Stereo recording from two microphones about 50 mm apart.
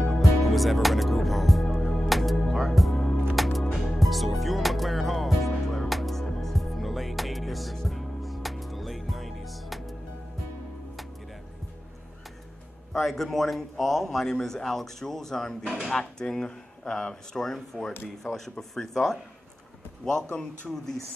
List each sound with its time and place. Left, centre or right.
0.0 s music: centre
2.9 s music: centre
3.3 s music: centre
12.9 s a man's voice: centre
20.2 s a man's voice: left
20.7 s speech: centre